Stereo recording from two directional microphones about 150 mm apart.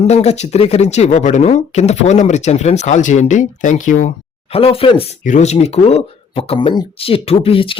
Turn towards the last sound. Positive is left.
turn(degrees=40)  # may be behind; listen again after turning